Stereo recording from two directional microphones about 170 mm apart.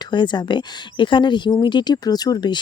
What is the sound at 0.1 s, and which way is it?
Speech, 25° left (ahead or behind).